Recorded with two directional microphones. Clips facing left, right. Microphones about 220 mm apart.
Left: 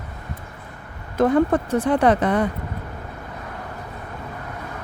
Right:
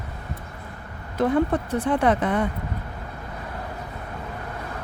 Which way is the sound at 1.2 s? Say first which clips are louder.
Left 4 dB; 45° left (ahead or behind).